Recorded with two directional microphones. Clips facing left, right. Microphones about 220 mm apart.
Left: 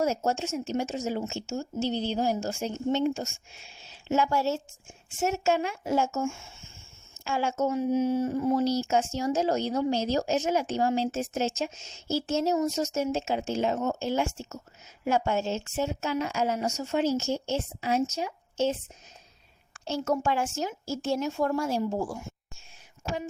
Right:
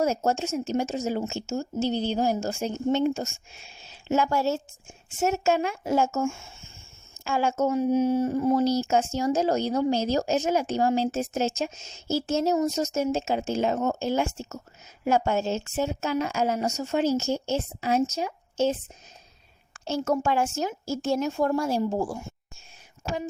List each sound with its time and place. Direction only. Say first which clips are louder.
0.0 s a woman's voice: right 2 dB; 45° right (ahead or behind)
7.3 s speech: right 3 dB; 45° right (ahead or behind)
19.8 s speech: right 2 dB; 45° right (ahead or behind)